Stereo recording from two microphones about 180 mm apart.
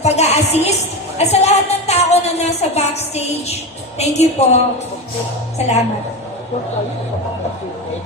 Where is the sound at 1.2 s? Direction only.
35° left (ahead or behind).